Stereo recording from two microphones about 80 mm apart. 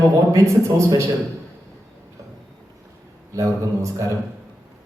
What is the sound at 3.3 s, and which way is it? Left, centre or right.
Speech, right.